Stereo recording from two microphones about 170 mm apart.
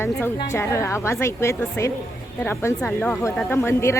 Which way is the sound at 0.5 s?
15° left (ahead or behind).